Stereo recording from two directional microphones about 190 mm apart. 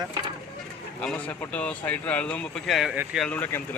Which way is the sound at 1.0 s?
5° left (ahead or behind).